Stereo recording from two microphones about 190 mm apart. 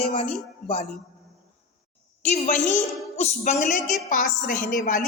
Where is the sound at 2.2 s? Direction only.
40° left (ahead or behind).